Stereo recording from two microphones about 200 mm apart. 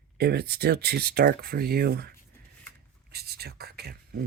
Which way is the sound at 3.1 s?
50° right (ahead or behind).